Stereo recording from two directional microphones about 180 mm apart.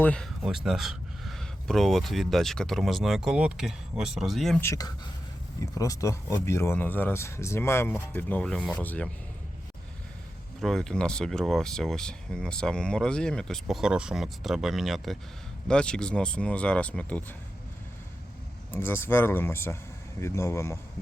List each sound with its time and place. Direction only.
0.0 s speech: 5° left (ahead or behind)
4.6 s speech: 20° left (ahead or behind)
10.6 s speech: centre (ahead or behind)
18.7 s speech: 10° left (ahead or behind)